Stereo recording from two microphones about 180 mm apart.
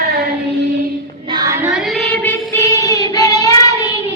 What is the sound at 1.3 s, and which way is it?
Child singing, 20° right (ahead or behind).